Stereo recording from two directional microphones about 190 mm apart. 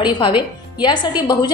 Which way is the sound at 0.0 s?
25° left (ahead or behind).